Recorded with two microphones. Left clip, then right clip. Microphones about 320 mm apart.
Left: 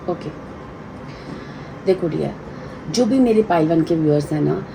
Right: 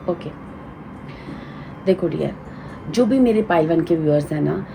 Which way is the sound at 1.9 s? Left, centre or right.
Right.